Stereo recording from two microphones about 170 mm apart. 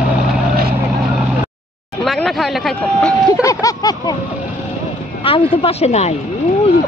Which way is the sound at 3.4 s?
20° left (ahead or behind).